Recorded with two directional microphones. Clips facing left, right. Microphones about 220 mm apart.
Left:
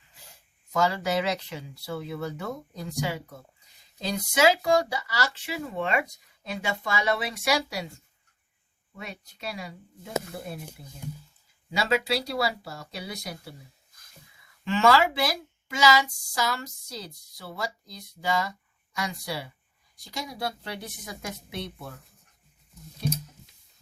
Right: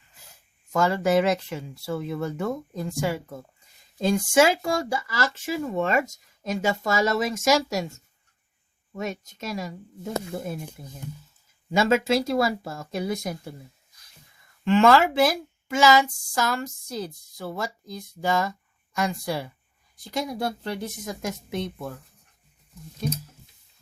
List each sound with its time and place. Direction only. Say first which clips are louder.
0.7 s speech: right 4 dB; 50° right (ahead or behind)
14.6 s speech: right 4 dB; 55° right (ahead or behind)